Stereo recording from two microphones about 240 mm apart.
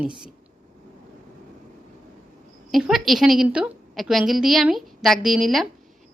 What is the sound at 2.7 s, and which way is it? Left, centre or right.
A woman's voice, centre.